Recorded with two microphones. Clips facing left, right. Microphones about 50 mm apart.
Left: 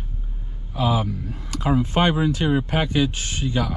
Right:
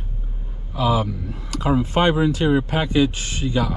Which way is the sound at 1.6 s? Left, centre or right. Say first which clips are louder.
Right 1 dB; right.